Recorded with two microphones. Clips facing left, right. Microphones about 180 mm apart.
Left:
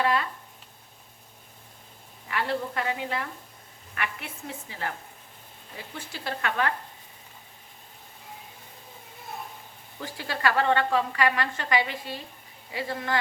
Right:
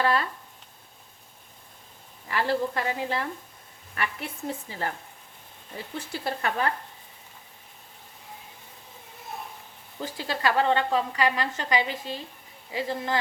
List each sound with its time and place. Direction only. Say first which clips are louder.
0.0 s speech: right 1 dB; 35° right (ahead or behind)
2.3 s speech: right 3 dB; 35° right (ahead or behind)
6.2 s speech: even; 35° right (ahead or behind)
10.0 s a woman's voice: right 1 dB; 25° right (ahead or behind)